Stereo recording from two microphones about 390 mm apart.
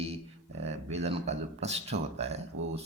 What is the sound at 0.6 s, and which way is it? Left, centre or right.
Speech, centre.